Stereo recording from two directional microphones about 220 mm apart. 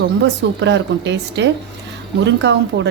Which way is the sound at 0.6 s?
55° right (ahead or behind).